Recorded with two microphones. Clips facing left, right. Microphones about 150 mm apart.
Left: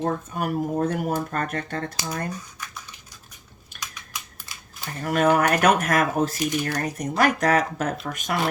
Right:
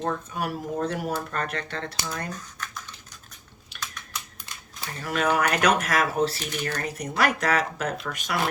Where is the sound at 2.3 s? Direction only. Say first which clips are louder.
Left 1 dB; 10° left (ahead or behind).